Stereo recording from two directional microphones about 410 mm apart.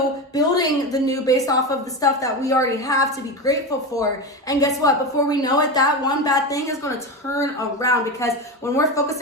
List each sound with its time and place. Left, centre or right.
0.3 s a woman's voice: centre